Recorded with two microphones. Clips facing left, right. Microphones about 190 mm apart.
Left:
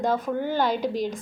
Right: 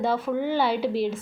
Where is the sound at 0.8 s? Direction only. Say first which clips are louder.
Right 2 dB; 40° left (ahead or behind).